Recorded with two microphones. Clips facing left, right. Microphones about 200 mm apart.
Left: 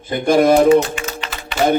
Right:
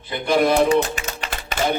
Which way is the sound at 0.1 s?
45° left (ahead or behind).